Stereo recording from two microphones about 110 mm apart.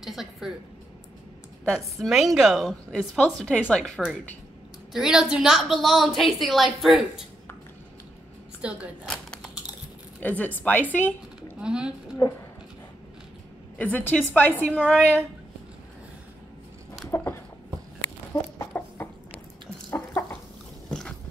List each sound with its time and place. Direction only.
0.0 s a sound: 5° right (ahead or behind)
1.6 s a woman's voice: centre (ahead or behind)
8.6 s a woman's voice: 10° right (ahead or behind)
9.0 s a sound: 5° left (ahead or behind)
10.2 s speech: 15° left (ahead or behind)
11.6 s a woman's voice: 10° right (ahead or behind)
13.7 s speech: 15° left (ahead or behind)
14.8 s a woman's voice: 10° right (ahead or behind)
17.1 s a sound: 25° left (ahead or behind)
18.3 s chicken: 20° left (ahead or behind)